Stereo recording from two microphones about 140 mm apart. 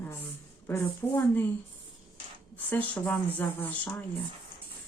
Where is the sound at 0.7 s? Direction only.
15° left (ahead or behind).